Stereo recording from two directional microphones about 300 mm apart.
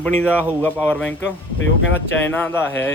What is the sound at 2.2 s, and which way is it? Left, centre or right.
Speech, centre.